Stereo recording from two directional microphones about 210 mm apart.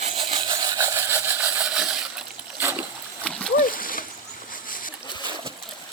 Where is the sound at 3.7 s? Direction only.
40° left (ahead or behind).